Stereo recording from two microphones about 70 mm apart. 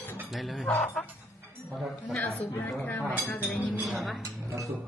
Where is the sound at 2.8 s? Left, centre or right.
Left.